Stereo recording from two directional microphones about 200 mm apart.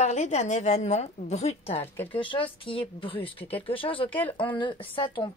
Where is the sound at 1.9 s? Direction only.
10° left (ahead or behind).